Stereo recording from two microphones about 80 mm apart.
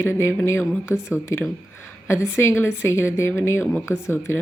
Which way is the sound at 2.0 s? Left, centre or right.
Left.